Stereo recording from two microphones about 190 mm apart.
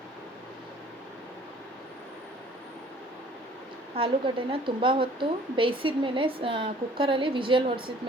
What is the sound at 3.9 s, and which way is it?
A woman's voice, 30° right (ahead or behind).